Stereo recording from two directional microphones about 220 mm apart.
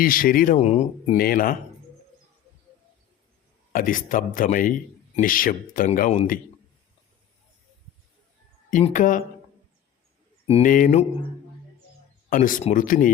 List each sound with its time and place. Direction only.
0.0 s speech: 40° left (ahead or behind)
3.7 s speech: 40° left (ahead or behind)
8.7 s speech: 35° left (ahead or behind)
10.4 s speech: 30° left (ahead or behind)
12.3 s speech: 40° left (ahead or behind)